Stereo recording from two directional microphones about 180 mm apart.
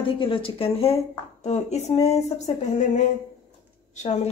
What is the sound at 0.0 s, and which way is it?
Speech, 30° left (ahead or behind).